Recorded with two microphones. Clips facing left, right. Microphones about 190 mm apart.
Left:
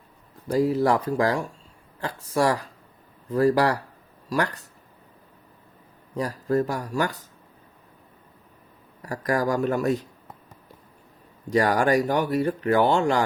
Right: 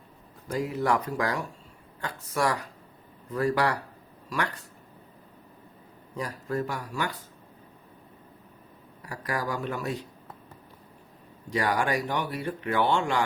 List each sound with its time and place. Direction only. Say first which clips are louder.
0.4 s speech: left 7 dB; 35° left (ahead or behind)
6.1 s speech: left 7 dB; 40° left (ahead or behind)
9.0 s speech: left 7 dB; 45° left (ahead or behind)
11.5 s speech: left 6 dB; 40° left (ahead or behind)